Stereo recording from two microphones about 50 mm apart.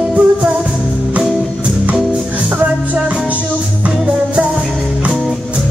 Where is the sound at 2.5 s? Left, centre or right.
Right.